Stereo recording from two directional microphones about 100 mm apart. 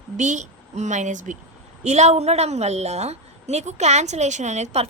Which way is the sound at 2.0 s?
90° right.